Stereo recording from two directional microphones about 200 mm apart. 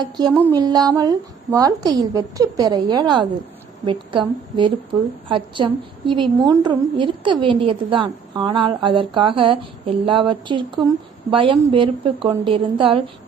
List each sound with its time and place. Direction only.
0.0 s a woman's voice: 20° right (ahead or behind)